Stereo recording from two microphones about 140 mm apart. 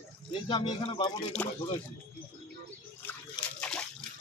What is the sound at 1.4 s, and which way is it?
Speech, 10° left (ahead or behind).